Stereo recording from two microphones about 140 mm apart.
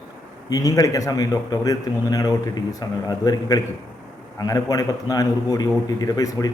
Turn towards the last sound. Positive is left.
turn(degrees=25)  # may be behind; listen again after turning